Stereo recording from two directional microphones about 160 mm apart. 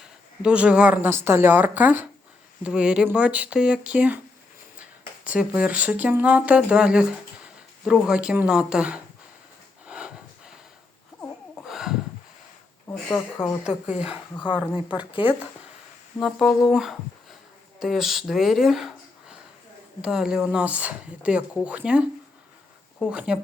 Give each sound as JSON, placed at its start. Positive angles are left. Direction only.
{"t": 0.4, "sound": "speech", "side_deg": -5}
{"t": 9.8, "sound": "a sound", "side_deg": -5}
{"t": 11.6, "sound": "a sound", "side_deg": 0}
{"t": 12.9, "sound": "speech", "side_deg": 10}
{"t": 13.7, "sound": "speech", "side_deg": -5}
{"t": 14.3, "sound": "speech", "side_deg": 30}
{"t": 16.1, "sound": "speech", "side_deg": 0}